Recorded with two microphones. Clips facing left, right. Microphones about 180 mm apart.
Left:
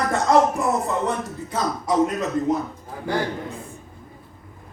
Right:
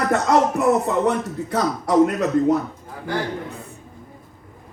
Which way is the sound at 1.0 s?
65° right (ahead or behind).